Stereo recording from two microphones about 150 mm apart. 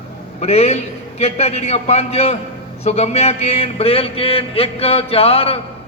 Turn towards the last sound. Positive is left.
turn(degrees=40)  # may be behind; listen again after turning